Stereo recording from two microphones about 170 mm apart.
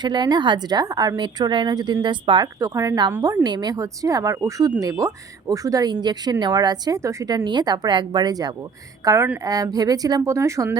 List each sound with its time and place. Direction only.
0.0 s a woman's voice: 25° right (ahead or behind)